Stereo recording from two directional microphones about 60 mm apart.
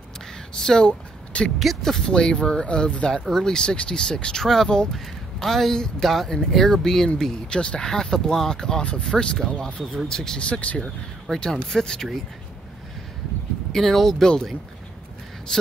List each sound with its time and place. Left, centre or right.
0.6 s speech: centre
1.6 s speech: centre; by 10.9 s left
11.2 s speech: centre
13.7 s speech: centre